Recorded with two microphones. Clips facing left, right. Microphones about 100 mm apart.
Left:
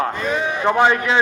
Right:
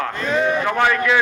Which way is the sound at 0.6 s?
25° left (ahead or behind).